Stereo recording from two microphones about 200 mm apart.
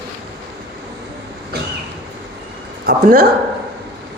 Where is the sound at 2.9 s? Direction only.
50° right (ahead or behind).